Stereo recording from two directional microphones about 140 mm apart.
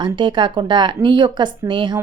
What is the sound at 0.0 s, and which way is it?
Speech, 35° right (ahead or behind).